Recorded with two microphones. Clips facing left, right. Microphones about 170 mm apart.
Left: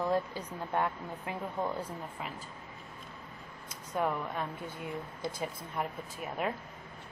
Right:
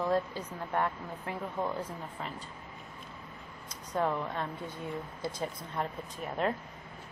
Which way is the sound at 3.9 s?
10° left (ahead or behind).